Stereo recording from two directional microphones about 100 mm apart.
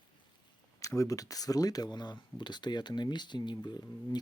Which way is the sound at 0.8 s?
35° left (ahead or behind).